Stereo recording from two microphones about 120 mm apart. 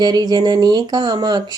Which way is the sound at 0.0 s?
35° right (ahead or behind).